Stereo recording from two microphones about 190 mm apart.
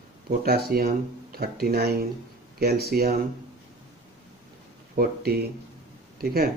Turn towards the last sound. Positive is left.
turn(degrees=-55)  # may be behind; listen again after turning